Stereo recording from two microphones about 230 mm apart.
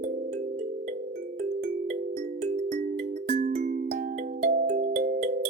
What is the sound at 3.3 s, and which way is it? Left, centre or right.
Music, right.